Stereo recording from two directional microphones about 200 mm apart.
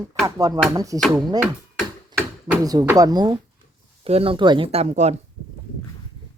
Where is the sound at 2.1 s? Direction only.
20° right (ahead or behind).